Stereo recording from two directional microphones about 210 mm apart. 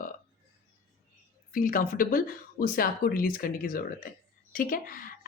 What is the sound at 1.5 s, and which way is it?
Speech, 40° left (ahead or behind).